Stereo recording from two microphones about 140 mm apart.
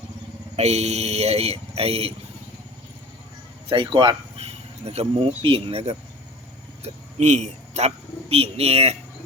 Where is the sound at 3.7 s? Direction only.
40° right (ahead or behind).